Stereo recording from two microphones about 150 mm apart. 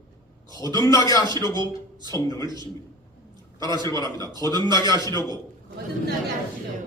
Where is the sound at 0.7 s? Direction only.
25° left (ahead or behind).